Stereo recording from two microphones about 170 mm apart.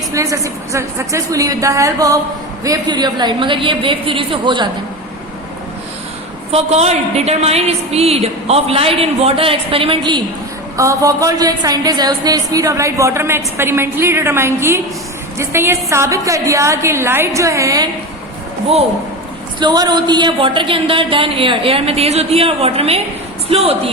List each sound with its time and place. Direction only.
0.1 s a woman's voice: 20° right (ahead or behind)
6.5 s a woman's voice: 40° right (ahead or behind); by 17.8 s 20° right (ahead or behind)
19.5 s a woman's voice: 25° right (ahead or behind)